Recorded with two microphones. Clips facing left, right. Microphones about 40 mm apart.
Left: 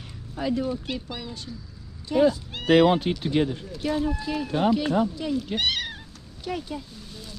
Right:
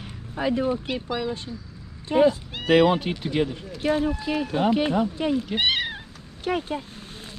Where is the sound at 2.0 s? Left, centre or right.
Right.